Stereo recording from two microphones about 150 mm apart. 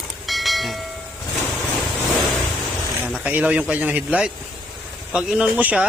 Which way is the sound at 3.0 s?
10° right (ahead or behind).